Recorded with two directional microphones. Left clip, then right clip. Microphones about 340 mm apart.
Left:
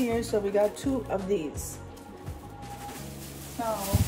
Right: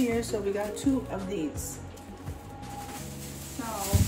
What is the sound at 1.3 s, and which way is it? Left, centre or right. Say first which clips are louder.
Speech: left 4 dB; left.